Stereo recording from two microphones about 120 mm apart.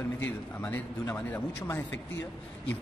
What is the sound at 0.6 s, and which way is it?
Speech, 15° left (ahead or behind).